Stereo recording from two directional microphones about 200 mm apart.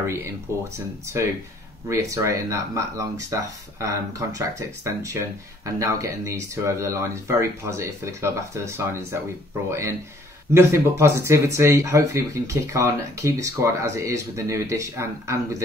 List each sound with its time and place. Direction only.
0.0 s speech: 10° right (ahead or behind)